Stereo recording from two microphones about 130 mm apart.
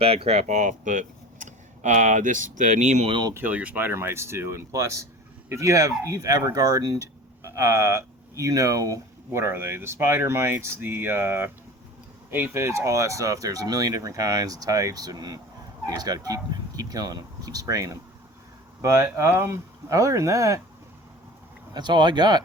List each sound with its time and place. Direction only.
0.0 s speech: 45° right (ahead or behind); by 3.1 s 65° right (ahead or behind)
3.1 s speech: 35° right (ahead or behind)
3.3 s speech: 15° right (ahead or behind)
21.7 s speech: 35° right (ahead or behind)